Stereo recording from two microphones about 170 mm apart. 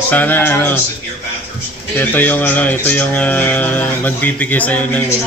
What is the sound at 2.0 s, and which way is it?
Speech, 10° left (ahead or behind).